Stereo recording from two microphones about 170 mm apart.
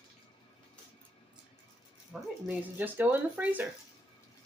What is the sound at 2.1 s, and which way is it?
Speech, centre (ahead or behind).